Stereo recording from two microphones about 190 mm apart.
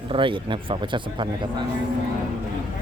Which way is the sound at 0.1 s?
25° right (ahead or behind).